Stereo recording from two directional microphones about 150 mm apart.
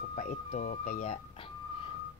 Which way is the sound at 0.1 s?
55° left (ahead or behind).